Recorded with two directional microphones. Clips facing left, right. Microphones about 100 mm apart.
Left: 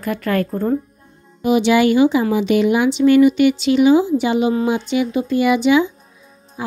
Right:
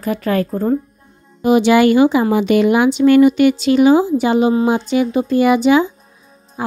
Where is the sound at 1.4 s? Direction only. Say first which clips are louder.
Right 3 dB; 45° right (ahead or behind).